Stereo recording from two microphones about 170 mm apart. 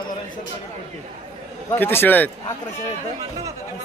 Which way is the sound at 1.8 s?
10° left (ahead or behind).